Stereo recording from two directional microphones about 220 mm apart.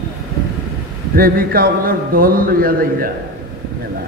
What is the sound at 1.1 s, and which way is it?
A man's voice, 40° right (ahead or behind).